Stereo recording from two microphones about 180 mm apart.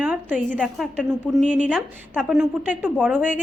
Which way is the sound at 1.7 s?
5° right (ahead or behind).